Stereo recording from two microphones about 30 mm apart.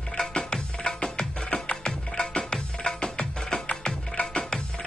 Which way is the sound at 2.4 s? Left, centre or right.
Left.